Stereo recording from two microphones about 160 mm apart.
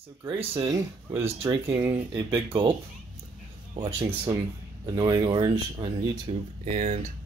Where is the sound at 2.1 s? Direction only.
30° right (ahead or behind).